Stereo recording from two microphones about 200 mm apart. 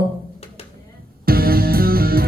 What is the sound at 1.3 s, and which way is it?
Music, 50° right (ahead or behind).